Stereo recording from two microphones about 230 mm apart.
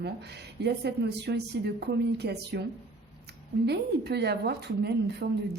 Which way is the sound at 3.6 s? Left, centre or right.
Right.